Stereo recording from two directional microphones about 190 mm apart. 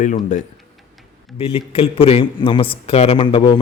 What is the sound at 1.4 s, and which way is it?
A man's voice, 30° left (ahead or behind).